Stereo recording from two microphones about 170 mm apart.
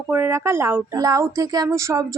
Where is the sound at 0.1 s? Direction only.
15° right (ahead or behind).